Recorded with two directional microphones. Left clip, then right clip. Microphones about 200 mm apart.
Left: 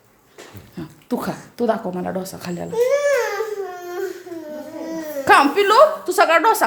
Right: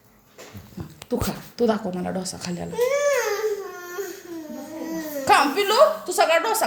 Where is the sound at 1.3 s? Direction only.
20° left (ahead or behind).